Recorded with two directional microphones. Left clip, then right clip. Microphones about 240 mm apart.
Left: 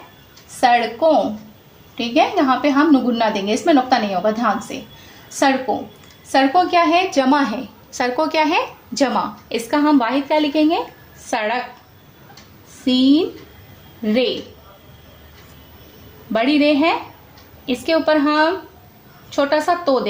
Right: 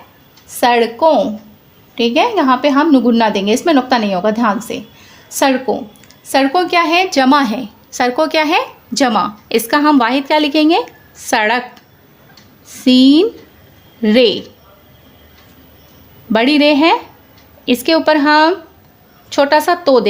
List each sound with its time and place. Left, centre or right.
0.6 s a woman's voice: right
12.8 s a woman's voice: right
16.3 s a woman's voice: right